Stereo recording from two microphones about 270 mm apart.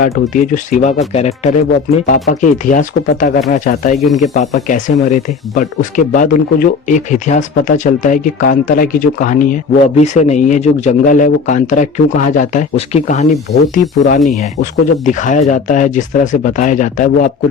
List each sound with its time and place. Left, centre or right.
0.0 s speech: left
3.9 s speech: centre
4.4 s speech: left
14.3 s speech: left